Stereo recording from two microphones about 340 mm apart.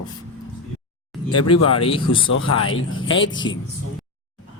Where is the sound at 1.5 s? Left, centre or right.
Left.